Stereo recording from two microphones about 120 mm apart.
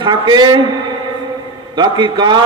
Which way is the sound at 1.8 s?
40° right (ahead or behind).